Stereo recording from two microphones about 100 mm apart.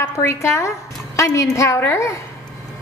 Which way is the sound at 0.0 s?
30° left (ahead or behind).